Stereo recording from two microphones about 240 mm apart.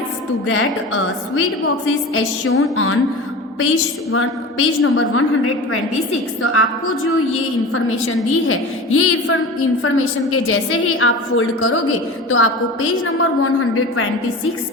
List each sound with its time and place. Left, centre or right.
0.4 s a woman's voice: left
4.1 s a woman's voice: left
6.4 s a woman's voice: left
7.7 s a woman's voice: left